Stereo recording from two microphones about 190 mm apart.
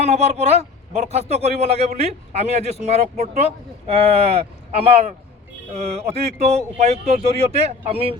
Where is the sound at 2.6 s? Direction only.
30° left (ahead or behind).